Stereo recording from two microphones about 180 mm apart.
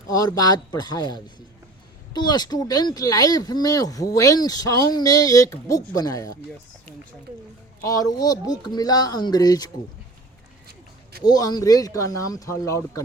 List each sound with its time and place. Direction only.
0.1 s speech: 20° left (ahead or behind)
7.8 s speech: 20° left (ahead or behind)
11.2 s speech: 20° left (ahead or behind)